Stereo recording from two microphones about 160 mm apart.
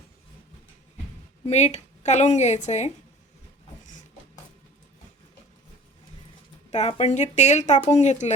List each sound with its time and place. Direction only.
1.5 s a woman's voice: 45° left (ahead or behind)
6.7 s a woman's voice: 45° left (ahead or behind)